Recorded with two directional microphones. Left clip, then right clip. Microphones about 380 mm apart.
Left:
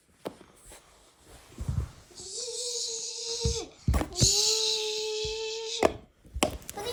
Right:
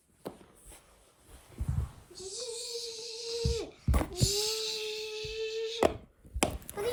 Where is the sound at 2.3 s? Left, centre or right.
Centre.